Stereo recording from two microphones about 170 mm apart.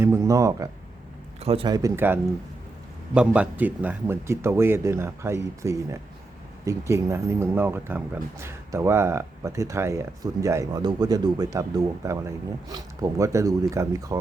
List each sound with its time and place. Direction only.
0.0 s speech: 15° right (ahead or behind)
1.4 s speech: 35° right (ahead or behind)
1.6 s speech: 25° right (ahead or behind)
3.2 s speech: 10° right (ahead or behind)